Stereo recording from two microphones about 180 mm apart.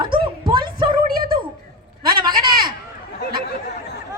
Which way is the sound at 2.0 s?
25° right (ahead or behind).